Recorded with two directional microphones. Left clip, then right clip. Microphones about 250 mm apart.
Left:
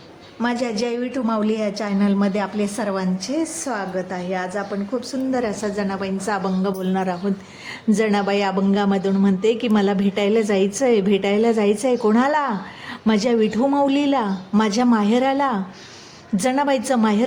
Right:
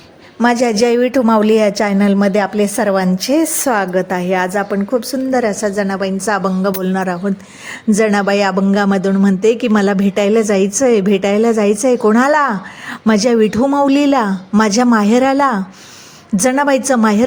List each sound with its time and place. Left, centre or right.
0.3 s a woman's voice: right